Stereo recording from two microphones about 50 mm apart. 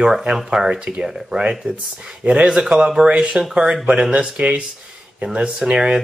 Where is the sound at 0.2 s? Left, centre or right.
Centre.